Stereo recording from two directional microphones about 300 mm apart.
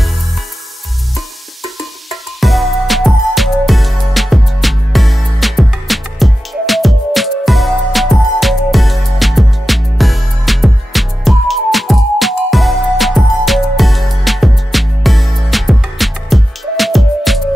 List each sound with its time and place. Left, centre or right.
1.1 s music: centre